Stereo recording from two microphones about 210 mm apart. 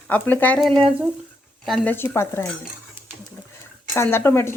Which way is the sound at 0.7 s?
25° right (ahead or behind).